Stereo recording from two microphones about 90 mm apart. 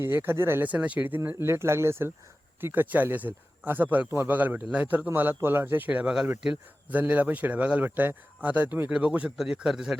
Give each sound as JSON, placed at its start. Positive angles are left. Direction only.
{"t": 0.0, "sound": "a man's voice", "side_deg": -25}